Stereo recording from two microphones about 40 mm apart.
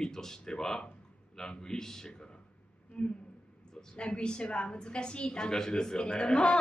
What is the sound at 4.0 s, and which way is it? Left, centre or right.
A woman's voice, left.